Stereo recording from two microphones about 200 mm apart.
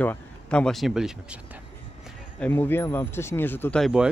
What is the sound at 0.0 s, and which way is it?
Speech, 5° left (ahead or behind).